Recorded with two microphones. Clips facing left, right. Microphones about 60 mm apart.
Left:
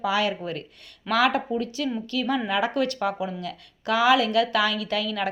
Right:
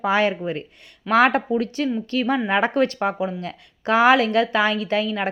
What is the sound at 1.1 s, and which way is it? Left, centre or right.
Speech, right.